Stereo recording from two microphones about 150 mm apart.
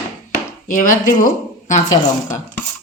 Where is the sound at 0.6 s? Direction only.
60° left (ahead or behind).